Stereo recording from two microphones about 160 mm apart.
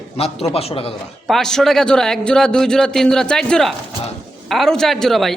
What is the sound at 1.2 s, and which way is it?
A man's voice, centre (ahead or behind).